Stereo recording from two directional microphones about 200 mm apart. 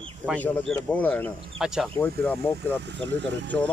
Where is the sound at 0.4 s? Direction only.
10° left (ahead or behind).